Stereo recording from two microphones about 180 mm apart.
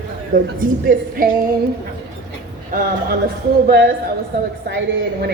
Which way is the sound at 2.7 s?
50° right (ahead or behind).